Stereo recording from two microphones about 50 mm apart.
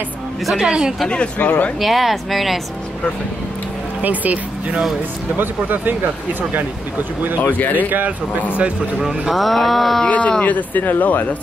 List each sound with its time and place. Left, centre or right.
0.6 s speech: centre
1.0 s speech: left
1.8 s a woman's voice: centre
4.0 s speech: right
7.7 s speech: right
9.3 s a woman's voice: centre
10.0 s speech: left